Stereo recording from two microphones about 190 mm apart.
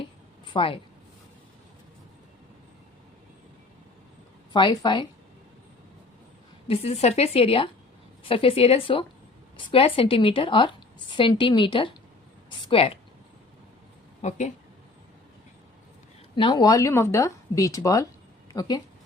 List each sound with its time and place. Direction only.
0.5 s a woman's voice: 30° left (ahead or behind)
4.5 s a woman's voice: 20° left (ahead or behind)
6.7 s a woman's voice: 35° left (ahead or behind)
14.2 s speech: 35° left (ahead or behind)
16.3 s speech: 25° left (ahead or behind)